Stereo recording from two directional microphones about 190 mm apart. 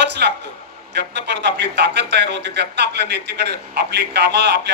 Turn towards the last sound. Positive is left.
turn(degrees=-60)  # may be behind; listen again after turning